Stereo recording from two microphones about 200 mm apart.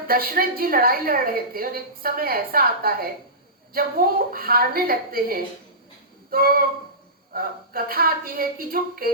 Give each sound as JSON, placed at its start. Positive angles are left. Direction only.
{"t": 0.1, "sound": "a woman's voice", "side_deg": -45}